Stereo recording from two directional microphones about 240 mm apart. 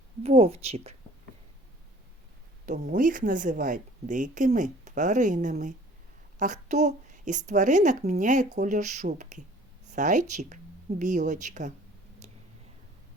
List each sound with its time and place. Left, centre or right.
0.2 s speech: right
2.6 s speech: right
12.2 s a sound: right